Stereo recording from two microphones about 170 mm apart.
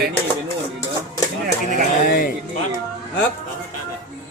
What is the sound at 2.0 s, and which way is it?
Music, 55° left (ahead or behind).